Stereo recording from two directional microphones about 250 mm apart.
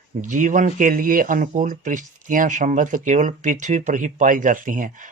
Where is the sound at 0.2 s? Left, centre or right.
Right.